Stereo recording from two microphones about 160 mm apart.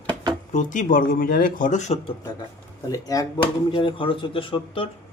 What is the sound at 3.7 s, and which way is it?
Speech, 30° left (ahead or behind).